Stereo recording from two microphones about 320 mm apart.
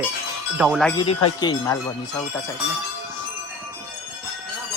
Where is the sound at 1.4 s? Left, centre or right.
Centre.